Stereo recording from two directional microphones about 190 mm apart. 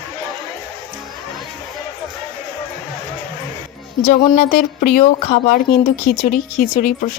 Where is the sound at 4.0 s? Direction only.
35° left (ahead or behind).